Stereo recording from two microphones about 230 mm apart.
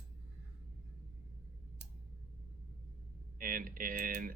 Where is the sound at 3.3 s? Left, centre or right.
Right.